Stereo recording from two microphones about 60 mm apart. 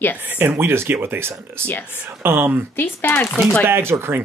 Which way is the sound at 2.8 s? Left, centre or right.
Left.